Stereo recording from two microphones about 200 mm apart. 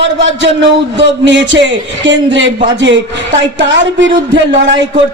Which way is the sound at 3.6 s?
65° right (ahead or behind).